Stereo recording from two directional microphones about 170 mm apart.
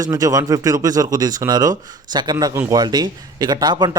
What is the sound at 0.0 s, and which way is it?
Speech, 20° right (ahead or behind).